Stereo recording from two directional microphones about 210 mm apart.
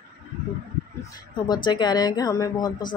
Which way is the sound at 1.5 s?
20° left (ahead or behind).